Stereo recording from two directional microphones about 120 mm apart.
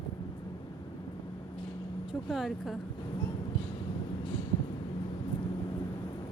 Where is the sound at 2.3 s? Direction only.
Centre (ahead or behind).